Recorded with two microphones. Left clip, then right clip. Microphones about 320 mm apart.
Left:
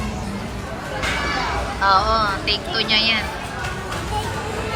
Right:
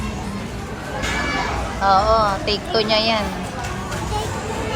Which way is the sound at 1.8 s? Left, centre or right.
Centre.